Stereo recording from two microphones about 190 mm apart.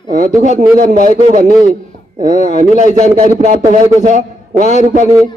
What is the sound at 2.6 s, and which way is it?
Speech, 40° right (ahead or behind).